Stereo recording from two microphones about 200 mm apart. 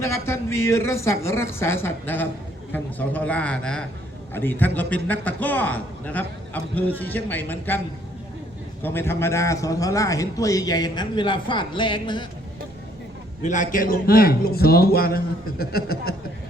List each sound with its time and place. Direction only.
0.0 s a man's voice: 15° left (ahead or behind)
8.8 s a man's voice: 10° left (ahead or behind)
13.4 s a man's voice: 40° left (ahead or behind)